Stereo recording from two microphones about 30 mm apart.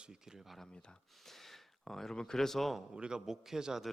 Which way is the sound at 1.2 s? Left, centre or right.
Centre.